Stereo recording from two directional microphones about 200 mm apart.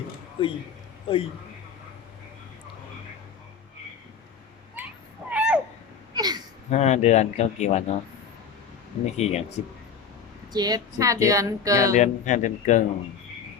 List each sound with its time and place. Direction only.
0.4 s speech: 25° left (ahead or behind)
5.3 s babbling: 5° right (ahead or behind)
6.1 s a sound: 20° right (ahead or behind)
6.7 s speech: 35° left (ahead or behind)
9.1 s speech: 35° left (ahead or behind)
10.5 s speech: 20° right (ahead or behind)
11.9 s speech: 35° left (ahead or behind)